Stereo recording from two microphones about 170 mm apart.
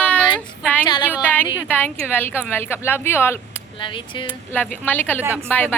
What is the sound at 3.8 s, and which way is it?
Speech, 30° left (ahead or behind).